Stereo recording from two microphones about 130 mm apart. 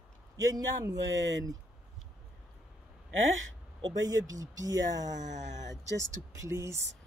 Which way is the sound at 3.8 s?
30° right (ahead or behind).